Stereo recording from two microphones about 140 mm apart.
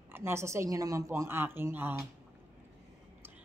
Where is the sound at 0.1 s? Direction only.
20° right (ahead or behind).